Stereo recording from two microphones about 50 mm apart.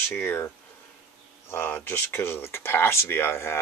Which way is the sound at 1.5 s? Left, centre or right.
Left.